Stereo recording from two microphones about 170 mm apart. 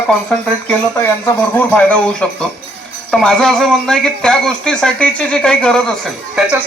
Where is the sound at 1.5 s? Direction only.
10° left (ahead or behind).